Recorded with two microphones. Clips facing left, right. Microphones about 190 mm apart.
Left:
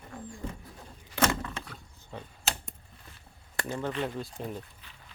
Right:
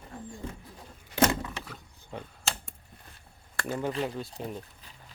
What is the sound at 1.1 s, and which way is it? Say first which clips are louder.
Door: right 3 dB; 15° right (ahead or behind).